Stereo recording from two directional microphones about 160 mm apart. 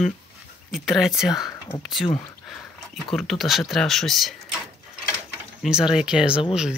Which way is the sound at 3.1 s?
Centre (ahead or behind).